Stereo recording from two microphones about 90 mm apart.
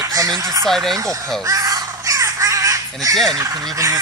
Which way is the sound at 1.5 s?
40° right (ahead or behind).